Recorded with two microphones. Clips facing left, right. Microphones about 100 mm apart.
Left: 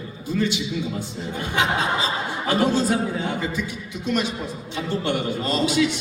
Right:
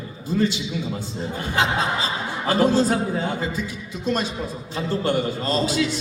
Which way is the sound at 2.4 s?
45° right (ahead or behind).